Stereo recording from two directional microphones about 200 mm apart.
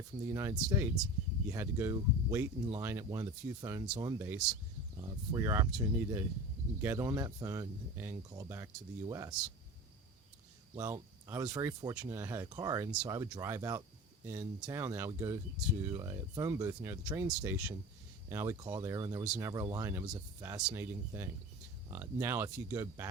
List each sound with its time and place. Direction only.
0.3 s speech: 15° right (ahead or behind)
10.8 s speech: 15° right (ahead or behind)
19.2 s speech: 5° right (ahead or behind)
19.5 s speech: 20° right (ahead or behind)